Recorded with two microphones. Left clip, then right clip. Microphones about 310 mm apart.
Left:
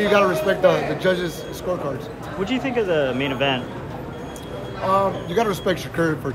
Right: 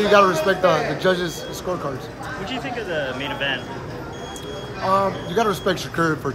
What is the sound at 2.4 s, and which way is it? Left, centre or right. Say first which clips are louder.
Speech: left 7 dB; centre.